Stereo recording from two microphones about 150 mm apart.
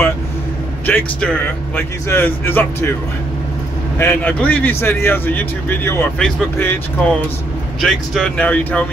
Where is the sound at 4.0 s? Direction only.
10° left (ahead or behind).